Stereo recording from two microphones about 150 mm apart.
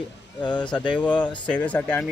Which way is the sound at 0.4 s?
30° left (ahead or behind).